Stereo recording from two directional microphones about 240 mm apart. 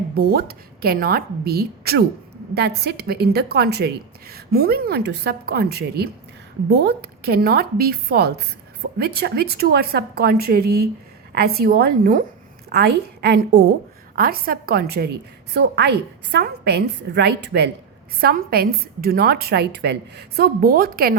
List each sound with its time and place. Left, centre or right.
0.1 s a woman's voice: right